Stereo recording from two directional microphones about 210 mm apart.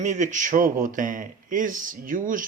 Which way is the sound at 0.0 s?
35° right (ahead or behind).